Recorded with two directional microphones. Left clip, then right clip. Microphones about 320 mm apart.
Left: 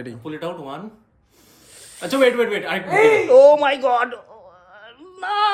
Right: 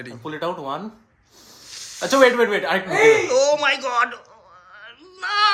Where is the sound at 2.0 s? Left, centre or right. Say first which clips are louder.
Right 2 dB; centre.